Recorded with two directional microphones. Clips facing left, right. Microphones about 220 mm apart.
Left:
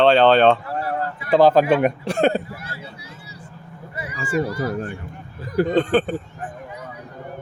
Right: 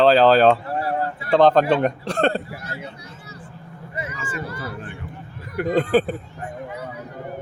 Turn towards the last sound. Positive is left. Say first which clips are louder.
# even
turn(degrees=-5)  # may be behind; listen again after turning